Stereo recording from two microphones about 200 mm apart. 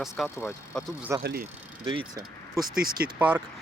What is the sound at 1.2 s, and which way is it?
Speech, 50° right (ahead or behind).